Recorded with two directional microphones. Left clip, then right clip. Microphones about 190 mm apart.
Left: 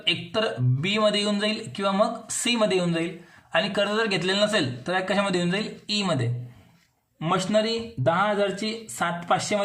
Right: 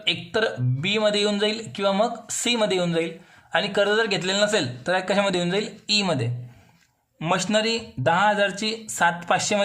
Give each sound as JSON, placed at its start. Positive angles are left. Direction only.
{"t": 0.0, "sound": "speech", "side_deg": -20}